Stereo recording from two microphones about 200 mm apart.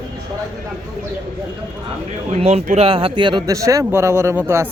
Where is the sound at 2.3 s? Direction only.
35° right (ahead or behind).